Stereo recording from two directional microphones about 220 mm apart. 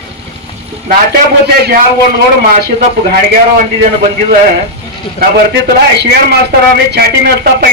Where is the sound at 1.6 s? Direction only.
45° right (ahead or behind).